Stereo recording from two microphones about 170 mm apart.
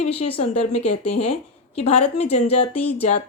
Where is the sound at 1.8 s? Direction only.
40° left (ahead or behind).